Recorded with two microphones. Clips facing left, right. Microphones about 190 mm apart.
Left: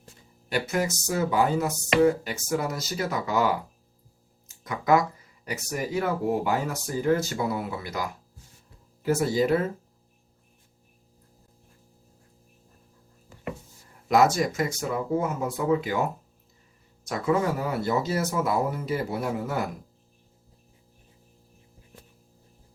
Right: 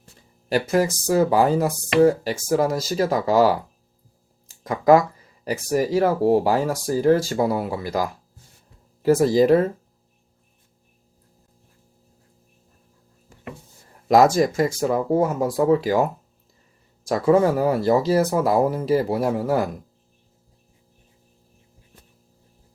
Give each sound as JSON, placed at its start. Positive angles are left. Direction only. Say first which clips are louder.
{"t": 0.5, "sound": "speech", "louder": "right 7 dB", "side_deg": -35}
{"t": 4.4, "sound": "a sound", "louder": "right 8 dB", "side_deg": -30}
{"t": 5.5, "sound": "speech", "louder": "right 9 dB", "side_deg": -35}
{"t": 14.5, "sound": "speech", "louder": "right 7 dB", "side_deg": -35}
{"t": 17.1, "sound": "speech", "louder": "right 8 dB", "side_deg": -35}